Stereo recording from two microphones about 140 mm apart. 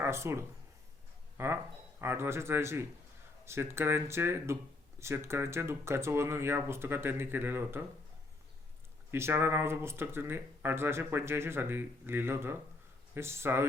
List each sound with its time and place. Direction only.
0.0 s speech: 20° right (ahead or behind)
9.1 s speech: 15° right (ahead or behind)